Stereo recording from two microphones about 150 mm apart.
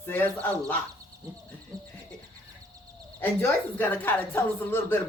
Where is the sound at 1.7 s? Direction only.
25° right (ahead or behind).